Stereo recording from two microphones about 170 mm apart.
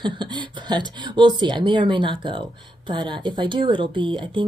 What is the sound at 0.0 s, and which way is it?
Speech, 25° right (ahead or behind).